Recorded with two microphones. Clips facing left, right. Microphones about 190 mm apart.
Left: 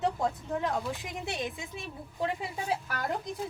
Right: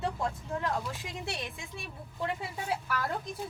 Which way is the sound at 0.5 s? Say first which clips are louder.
Left 2 dB; 20° left (ahead or behind).